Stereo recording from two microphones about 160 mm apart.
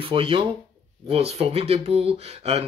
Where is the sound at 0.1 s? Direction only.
35° right (ahead or behind).